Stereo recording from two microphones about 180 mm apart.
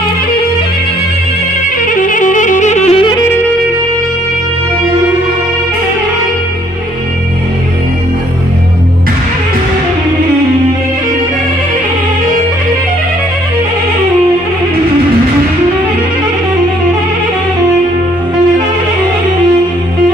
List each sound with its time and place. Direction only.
2.0 s music: 45° left (ahead or behind)